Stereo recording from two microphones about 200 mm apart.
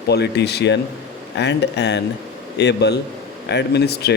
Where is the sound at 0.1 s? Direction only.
55° left (ahead or behind).